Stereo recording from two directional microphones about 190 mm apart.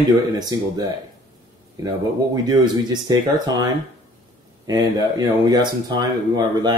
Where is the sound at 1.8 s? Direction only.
20° right (ahead or behind).